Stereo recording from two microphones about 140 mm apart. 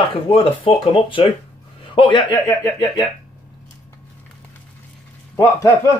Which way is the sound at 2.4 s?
20° left (ahead or behind).